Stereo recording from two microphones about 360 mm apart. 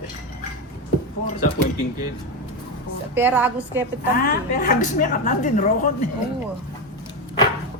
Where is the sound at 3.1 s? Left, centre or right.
Centre.